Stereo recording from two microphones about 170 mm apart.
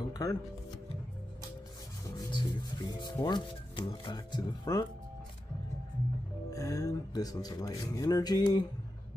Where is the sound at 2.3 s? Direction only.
25° left (ahead or behind).